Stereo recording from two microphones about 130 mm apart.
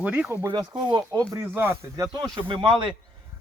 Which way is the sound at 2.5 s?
40° right (ahead or behind).